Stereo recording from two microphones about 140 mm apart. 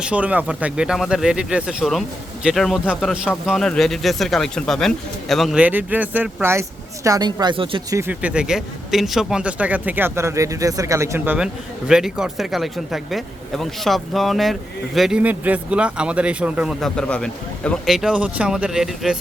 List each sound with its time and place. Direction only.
0.0 s speech: 10° right (ahead or behind)
5.6 s speech: 10° right (ahead or behind); by 7.8 s 40° right (ahead or behind)
7.9 s speech: 20° right (ahead or behind)
8.2 s speech: 5° right (ahead or behind)
11.9 s speech: 5° right (ahead or behind)
16.8 s a man's voice: 5° left (ahead or behind)
17.8 s speech: 5° right (ahead or behind)